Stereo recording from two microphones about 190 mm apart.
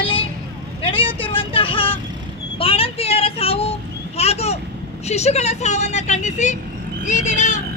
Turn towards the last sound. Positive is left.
turn(degrees=40)  # may be behind; listen again after turning